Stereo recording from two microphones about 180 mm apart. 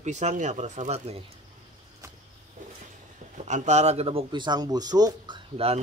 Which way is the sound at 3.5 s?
40° right (ahead or behind).